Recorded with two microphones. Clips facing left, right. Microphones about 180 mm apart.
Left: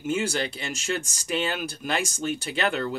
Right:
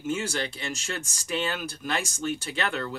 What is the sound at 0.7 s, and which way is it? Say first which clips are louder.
Speech: left 4 dB; 20° left (ahead or behind).